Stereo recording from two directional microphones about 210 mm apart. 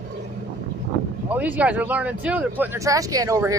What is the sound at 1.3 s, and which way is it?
Speech, 5° right (ahead or behind).